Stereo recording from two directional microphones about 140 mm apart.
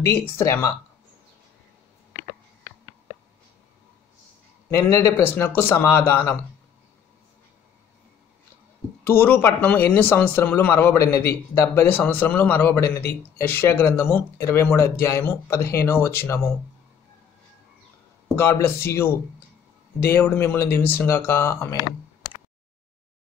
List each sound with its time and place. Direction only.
0.4 s speech: 20° left (ahead or behind)
4.6 s a man's voice: 20° left (ahead or behind)
9.0 s a man's voice: 15° left (ahead or behind)
18.4 s a man's voice: 15° left (ahead or behind)